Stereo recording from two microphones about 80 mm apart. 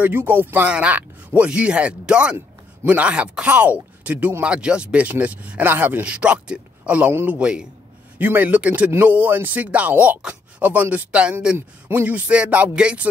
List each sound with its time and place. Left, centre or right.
0.0 s speech: right
7.1 s speech: right
7.3 s speech: centre
8.2 s speech: right
11.5 s speech: right